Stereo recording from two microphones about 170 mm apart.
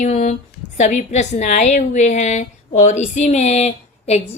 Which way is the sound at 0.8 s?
45° left (ahead or behind).